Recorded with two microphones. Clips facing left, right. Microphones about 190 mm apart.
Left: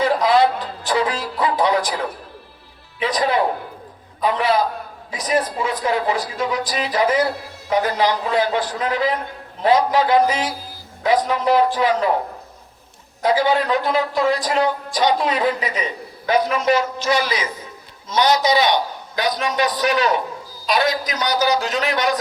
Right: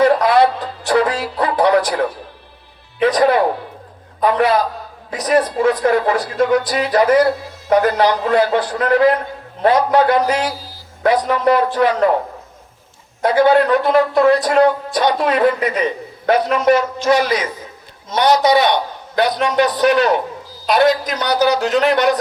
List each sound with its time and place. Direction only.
0.0 s music: 60° right (ahead or behind)
3.0 s a man's voice: 60° right (ahead or behind)
13.2 s speech: 60° right (ahead or behind)